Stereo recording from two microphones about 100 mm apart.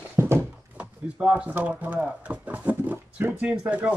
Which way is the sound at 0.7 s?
15° right (ahead or behind).